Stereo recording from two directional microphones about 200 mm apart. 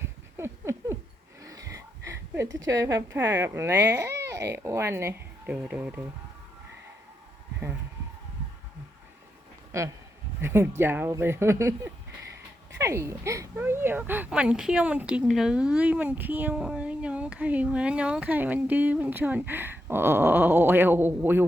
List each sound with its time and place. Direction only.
0.3 s a sound: 15° right (ahead or behind)
2.6 s speech: 15° right (ahead or behind)
9.7 s speech: 15° right (ahead or behind)